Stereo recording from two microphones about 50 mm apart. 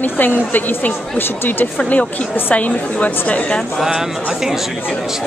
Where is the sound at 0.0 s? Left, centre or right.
Left.